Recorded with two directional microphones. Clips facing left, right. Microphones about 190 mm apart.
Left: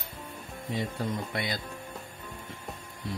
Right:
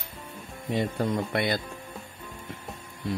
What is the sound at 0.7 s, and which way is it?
Speech, 60° right (ahead or behind).